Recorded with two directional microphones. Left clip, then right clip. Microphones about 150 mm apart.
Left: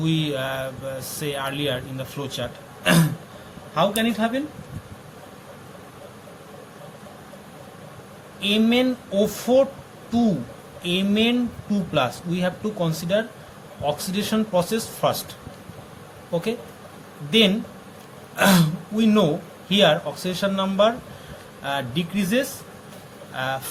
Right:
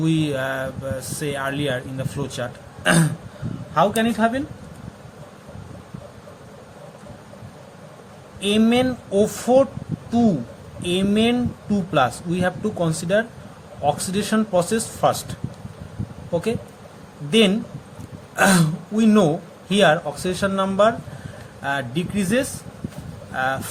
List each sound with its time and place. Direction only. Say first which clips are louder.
0.0 s speech: right 3 dB; 55° right (ahead or behind)
8.4 s speech: right 1 dB; 60° right (ahead or behind)